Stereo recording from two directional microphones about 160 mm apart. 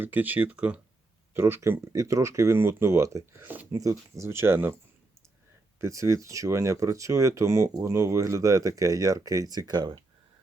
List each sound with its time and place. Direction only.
0.0 s speech: 10° right (ahead or behind)
5.8 s speech: 20° right (ahead or behind)